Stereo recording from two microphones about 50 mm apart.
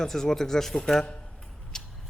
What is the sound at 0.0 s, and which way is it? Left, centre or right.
Speech, centre.